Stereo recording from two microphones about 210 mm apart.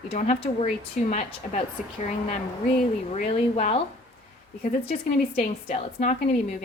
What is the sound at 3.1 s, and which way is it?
Speech, 30° left (ahead or behind).